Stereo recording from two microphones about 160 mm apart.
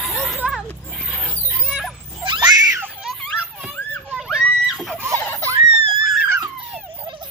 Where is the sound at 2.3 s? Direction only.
30° right (ahead or behind).